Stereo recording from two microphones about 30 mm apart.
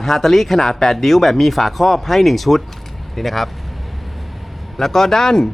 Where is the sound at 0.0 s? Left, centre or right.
Centre.